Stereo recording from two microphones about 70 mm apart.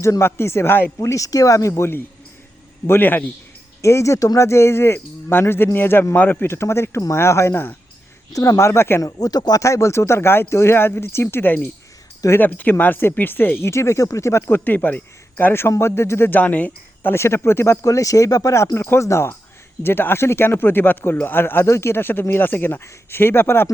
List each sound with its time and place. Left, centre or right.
0.0 s speech: left
0.9 s speech: left
3.8 s speech: left
6.5 s speech: left
8.3 s speech: left
9.0 s speech: left
9.6 s speech: left
13.7 s speech: left
16.4 s speech: left
17.8 s speech: left